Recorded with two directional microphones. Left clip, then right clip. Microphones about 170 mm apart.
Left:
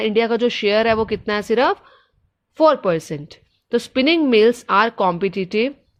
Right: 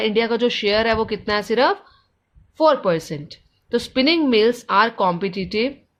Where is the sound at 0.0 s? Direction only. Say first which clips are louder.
Left 1 dB; 40° left (ahead or behind).